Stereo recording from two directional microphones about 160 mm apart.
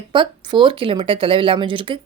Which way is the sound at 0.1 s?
30° right (ahead or behind).